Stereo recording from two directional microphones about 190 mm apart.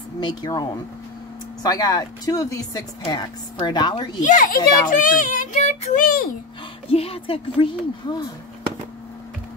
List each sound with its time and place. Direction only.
0.2 s speech: 25° left (ahead or behind)
4.2 s speech: 45° left (ahead or behind)
6.9 s speech: 30° left (ahead or behind)